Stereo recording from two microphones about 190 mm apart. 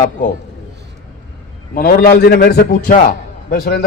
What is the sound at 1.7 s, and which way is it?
A man's voice, 50° left (ahead or behind).